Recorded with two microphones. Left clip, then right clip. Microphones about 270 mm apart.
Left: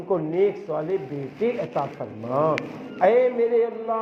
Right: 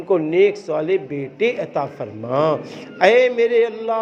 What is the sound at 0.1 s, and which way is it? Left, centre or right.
A man's voice, right.